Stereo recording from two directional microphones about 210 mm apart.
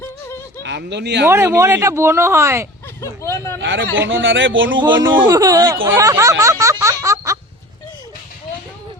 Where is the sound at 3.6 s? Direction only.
60° right (ahead or behind).